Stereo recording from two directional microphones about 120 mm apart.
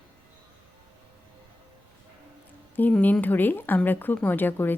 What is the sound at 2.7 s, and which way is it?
Speech, 15° left (ahead or behind).